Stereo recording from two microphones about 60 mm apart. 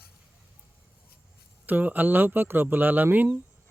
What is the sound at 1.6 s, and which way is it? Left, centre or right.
Speech, right.